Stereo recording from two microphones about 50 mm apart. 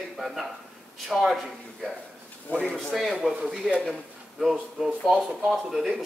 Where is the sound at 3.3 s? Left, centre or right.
Centre.